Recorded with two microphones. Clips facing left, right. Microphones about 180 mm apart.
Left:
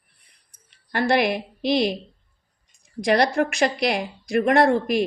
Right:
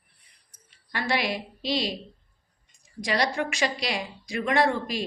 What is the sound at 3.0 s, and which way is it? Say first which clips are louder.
Speech: left 7 dB; 60° left (ahead or behind).